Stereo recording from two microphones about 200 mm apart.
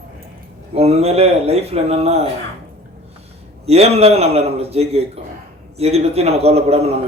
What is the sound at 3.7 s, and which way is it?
A man's voice, 30° right (ahead or behind).